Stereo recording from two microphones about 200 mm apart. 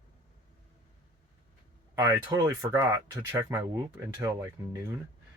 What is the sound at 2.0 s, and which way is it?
Speech, 15° right (ahead or behind).